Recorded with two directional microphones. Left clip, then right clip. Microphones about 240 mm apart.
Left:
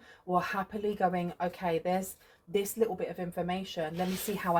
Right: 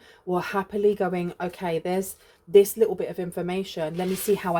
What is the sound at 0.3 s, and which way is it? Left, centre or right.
Speech, right.